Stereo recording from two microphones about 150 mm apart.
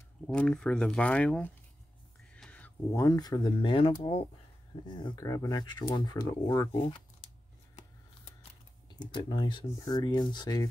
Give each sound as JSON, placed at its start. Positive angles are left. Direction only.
{"t": 0.3, "sound": "speech", "side_deg": 5}
{"t": 4.8, "sound": "speech", "side_deg": 30}
{"t": 8.8, "sound": "speech", "side_deg": 30}